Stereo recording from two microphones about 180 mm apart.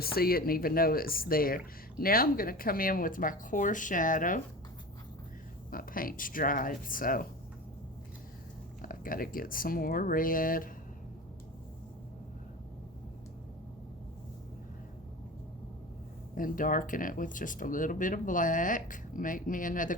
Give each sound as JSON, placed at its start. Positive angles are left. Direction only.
{"t": 0.0, "sound": "speech", "side_deg": 55}
{"t": 5.7, "sound": "speech", "side_deg": 50}
{"t": 8.8, "sound": "speech", "side_deg": 50}
{"t": 16.3, "sound": "speech", "side_deg": 50}